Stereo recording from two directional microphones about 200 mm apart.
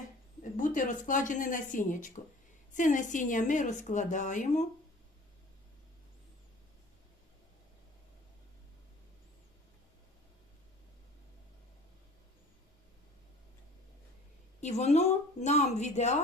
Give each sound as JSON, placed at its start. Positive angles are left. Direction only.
{"t": 0.5, "sound": "a woman's voice", "side_deg": 40}
{"t": 14.6, "sound": "a woman's voice", "side_deg": 35}